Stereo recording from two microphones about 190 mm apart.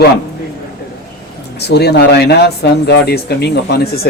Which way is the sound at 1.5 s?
60° left (ahead or behind).